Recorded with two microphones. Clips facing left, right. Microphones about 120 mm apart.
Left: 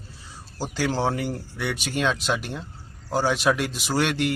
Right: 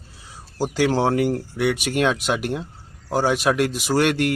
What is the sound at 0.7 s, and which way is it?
Speech, 55° right (ahead or behind).